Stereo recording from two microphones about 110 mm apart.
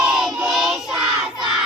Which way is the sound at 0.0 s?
5° right (ahead or behind).